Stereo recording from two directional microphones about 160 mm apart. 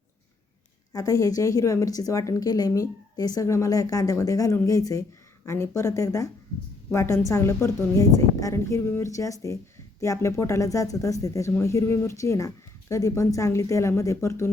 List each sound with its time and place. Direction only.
0.9 s a woman's voice: 20° left (ahead or behind)